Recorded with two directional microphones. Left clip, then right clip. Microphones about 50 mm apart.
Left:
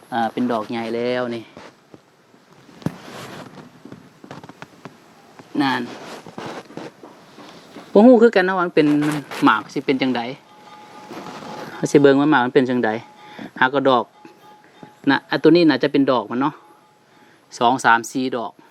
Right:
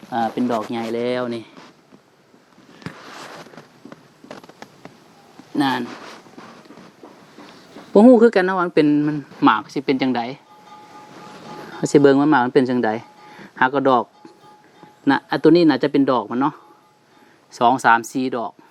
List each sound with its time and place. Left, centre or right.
0.1 s speech: right
5.5 s speech: right
7.3 s a sound: centre
7.9 s speech: right
11.8 s speech: right
12.5 s a sound: right
15.0 s speech: right